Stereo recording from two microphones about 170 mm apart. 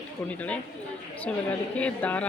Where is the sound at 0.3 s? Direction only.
10° left (ahead or behind).